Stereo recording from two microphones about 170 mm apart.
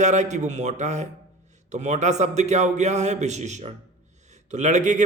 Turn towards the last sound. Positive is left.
turn(degrees=-45)  # may be behind; listen again after turning